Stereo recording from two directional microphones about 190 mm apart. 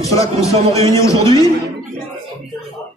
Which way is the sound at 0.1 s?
15° left (ahead or behind).